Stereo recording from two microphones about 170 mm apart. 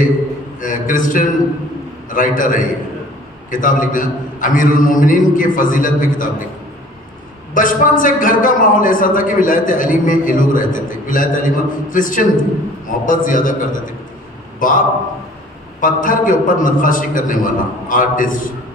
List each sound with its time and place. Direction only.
0.6 s a man's voice: 50° left (ahead or behind)
7.5 s a man's voice: 50° left (ahead or behind)